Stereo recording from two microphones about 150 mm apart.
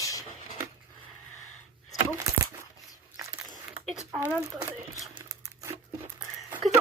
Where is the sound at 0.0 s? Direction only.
25° left (ahead or behind).